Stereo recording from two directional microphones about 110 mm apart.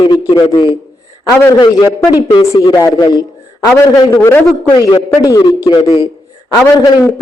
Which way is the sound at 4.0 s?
30° left (ahead or behind).